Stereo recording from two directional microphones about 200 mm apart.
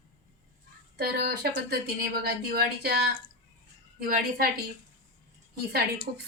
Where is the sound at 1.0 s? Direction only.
55° right (ahead or behind).